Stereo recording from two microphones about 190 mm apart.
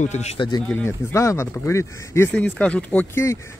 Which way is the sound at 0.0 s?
35° left (ahead or behind).